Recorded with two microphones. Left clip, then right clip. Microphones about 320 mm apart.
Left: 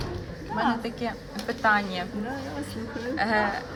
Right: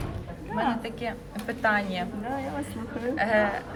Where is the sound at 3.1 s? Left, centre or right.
Centre.